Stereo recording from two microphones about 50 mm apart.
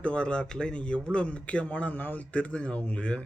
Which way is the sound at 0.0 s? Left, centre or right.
Left.